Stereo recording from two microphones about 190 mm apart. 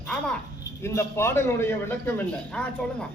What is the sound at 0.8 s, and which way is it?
A man's voice, 15° left (ahead or behind).